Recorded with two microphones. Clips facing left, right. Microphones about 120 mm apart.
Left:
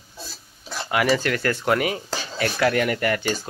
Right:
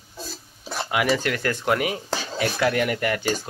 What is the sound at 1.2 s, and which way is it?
Speech, 10° right (ahead or behind).